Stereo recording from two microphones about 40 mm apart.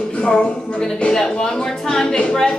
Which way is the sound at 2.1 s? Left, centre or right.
Left.